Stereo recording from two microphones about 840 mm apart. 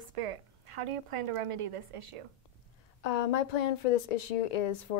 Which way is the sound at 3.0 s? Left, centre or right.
Left.